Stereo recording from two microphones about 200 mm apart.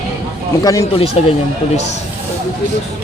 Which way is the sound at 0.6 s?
15° left (ahead or behind).